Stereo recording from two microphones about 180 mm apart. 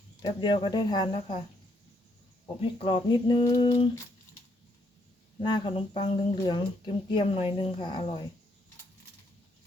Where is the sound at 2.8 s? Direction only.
25° left (ahead or behind).